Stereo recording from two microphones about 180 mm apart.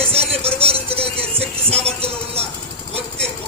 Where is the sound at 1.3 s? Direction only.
5° left (ahead or behind).